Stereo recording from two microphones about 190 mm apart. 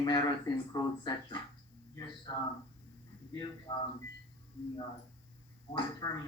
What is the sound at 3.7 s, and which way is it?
Speech, 25° left (ahead or behind).